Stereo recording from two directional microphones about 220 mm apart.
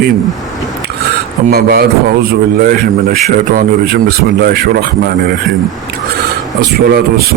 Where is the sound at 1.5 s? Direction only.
45° right (ahead or behind).